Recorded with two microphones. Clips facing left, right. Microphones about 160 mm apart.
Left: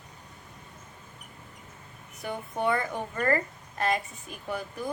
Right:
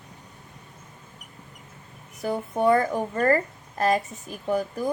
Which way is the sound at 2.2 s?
35° right (ahead or behind).